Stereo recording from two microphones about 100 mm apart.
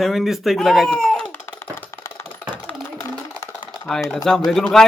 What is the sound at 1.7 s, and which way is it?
Music, 30° left (ahead or behind).